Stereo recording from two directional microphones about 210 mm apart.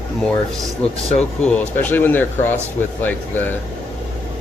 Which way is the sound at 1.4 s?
5° left (ahead or behind).